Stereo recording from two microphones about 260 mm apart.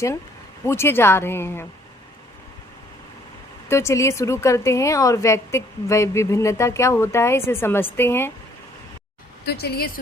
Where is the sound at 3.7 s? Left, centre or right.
Centre.